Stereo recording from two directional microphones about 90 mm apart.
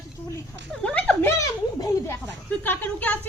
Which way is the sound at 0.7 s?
10° left (ahead or behind).